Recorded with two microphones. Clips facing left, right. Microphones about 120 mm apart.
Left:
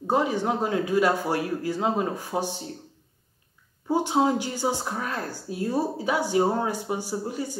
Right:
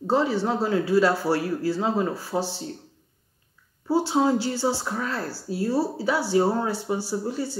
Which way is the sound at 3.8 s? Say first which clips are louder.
Right 1 dB; 15° left (ahead or behind).